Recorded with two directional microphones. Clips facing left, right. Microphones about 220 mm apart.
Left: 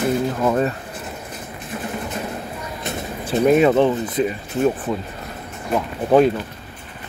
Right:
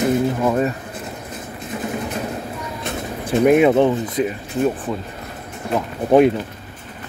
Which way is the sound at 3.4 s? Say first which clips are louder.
Right 1 dB; 10° right (ahead or behind).